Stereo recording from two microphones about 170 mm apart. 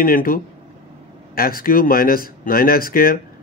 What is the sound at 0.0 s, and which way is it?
A man's voice, 55° left (ahead or behind).